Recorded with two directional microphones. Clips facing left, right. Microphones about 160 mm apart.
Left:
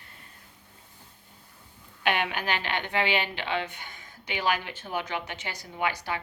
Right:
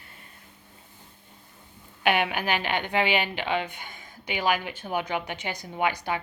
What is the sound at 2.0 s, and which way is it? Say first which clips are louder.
A woman's voice: right 3 dB; 10° right (ahead or behind).